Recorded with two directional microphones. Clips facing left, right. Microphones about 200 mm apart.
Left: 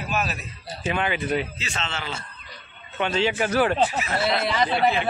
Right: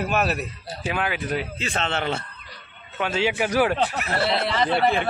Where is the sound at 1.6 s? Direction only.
55° right (ahead or behind).